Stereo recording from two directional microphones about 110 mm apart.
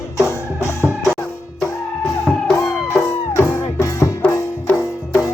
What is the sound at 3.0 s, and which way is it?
Music, 25° left (ahead or behind).